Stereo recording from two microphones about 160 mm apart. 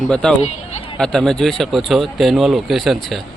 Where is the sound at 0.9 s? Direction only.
5° left (ahead or behind).